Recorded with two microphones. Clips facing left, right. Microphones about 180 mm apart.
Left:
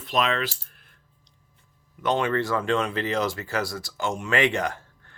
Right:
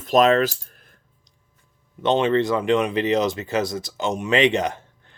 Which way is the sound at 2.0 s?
20° right (ahead or behind).